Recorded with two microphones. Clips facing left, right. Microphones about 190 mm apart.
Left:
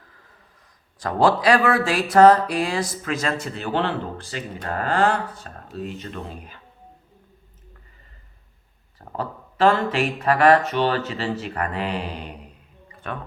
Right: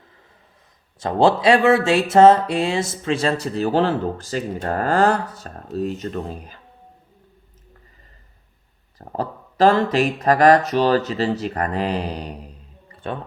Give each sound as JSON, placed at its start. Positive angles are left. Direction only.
{"t": 0.9, "sound": "speech", "side_deg": -25}
{"t": 9.0, "sound": "speech", "side_deg": -40}